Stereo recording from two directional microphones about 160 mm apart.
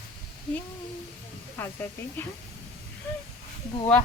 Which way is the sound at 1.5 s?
15° left (ahead or behind).